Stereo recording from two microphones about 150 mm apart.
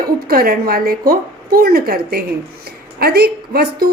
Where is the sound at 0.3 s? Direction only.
85° right.